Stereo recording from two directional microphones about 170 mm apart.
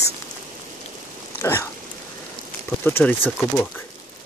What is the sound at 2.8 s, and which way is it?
Speech, 10° left (ahead or behind).